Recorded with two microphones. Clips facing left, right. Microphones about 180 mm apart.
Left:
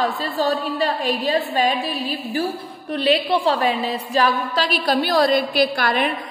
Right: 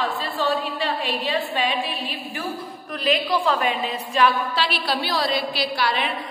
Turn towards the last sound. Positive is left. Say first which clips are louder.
# left 5 dB
turn(degrees=50)  # may be behind; listen again after turning